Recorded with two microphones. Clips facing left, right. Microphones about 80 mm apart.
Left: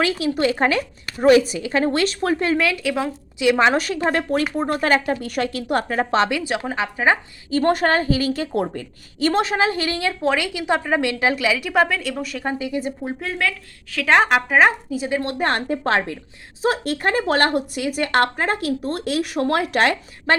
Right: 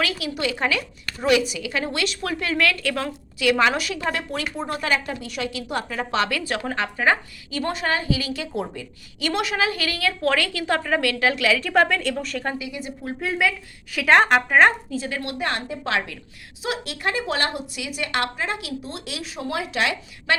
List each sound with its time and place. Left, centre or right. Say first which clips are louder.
0.0 s a woman's voice: left 6 dB; left
2.6 s a woman's voice: left 2 dB; centre
3.8 s a woman's voice: left 5 dB; left
6.3 s a woman's voice: left 2 dB; centre
7.5 s a woman's voice: left 7 dB; left; by 12.5 s centre
12.5 s a woman's voice: left 7 dB; left
13.4 s a woman's voice: right 1 dB; centre
14.1 s speech: even; centre
15.2 s a woman's voice: left 5 dB; left